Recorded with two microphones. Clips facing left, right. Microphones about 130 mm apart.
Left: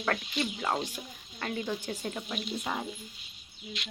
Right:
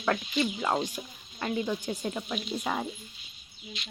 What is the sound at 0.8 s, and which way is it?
Frying, 25° right (ahead or behind).